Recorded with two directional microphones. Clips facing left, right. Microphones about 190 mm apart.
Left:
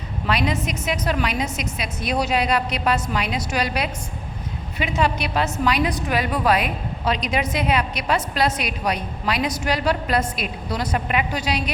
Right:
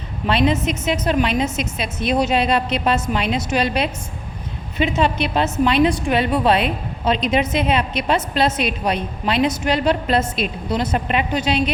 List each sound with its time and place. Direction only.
0.3 s a woman's voice: 25° right (ahead or behind)